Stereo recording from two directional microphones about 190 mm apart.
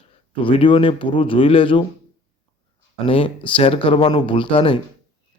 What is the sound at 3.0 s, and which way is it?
Speech, 30° left (ahead or behind).